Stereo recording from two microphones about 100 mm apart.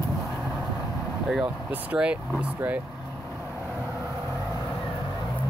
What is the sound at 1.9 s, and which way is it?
Speech, 10° right (ahead or behind).